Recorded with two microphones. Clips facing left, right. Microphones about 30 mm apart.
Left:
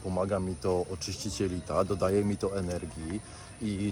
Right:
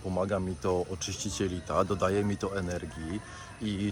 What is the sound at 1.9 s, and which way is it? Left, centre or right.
Speech, right.